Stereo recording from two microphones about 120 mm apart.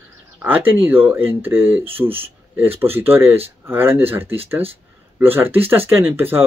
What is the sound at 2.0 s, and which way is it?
Speech, 50° right (ahead or behind).